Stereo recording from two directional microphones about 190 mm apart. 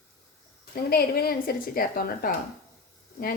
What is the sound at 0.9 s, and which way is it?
Speech, 55° left (ahead or behind).